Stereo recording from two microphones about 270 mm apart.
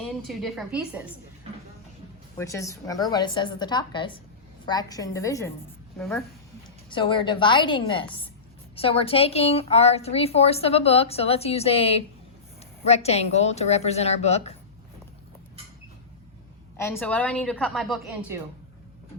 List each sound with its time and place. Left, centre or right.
0.0 s a woman's voice: centre
2.4 s a woman's voice: centre
16.7 s a woman's voice: centre